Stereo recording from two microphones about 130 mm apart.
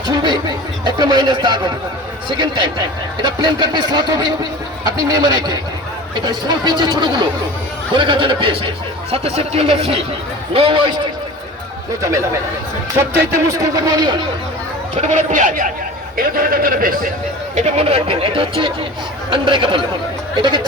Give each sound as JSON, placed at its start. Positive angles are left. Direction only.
{"t": 0.2, "sound": "speech", "side_deg": -35}
{"t": 9.1, "sound": "speech", "side_deg": -50}
{"t": 12.0, "sound": "speech", "side_deg": -25}
{"t": 15.0, "sound": "speech", "side_deg": -70}
{"t": 17.5, "sound": "speech", "side_deg": -55}